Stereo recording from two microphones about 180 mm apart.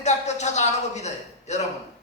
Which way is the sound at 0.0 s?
40° left (ahead or behind).